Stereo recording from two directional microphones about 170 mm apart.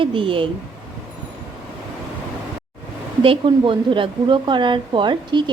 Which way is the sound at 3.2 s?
30° right (ahead or behind).